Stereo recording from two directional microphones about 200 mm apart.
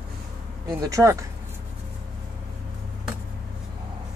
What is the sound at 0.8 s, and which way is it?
Speech, 15° right (ahead or behind).